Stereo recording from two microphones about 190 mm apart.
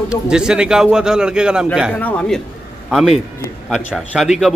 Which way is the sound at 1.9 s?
5° left (ahead or behind).